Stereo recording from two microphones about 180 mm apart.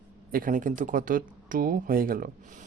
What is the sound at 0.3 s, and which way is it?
Speech, 50° right (ahead or behind).